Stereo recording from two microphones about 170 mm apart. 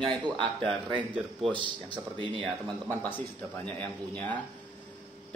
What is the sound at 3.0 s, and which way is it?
A man's voice, 10° left (ahead or behind).